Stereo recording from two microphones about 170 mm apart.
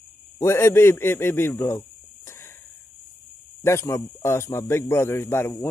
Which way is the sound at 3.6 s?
15° left (ahead or behind).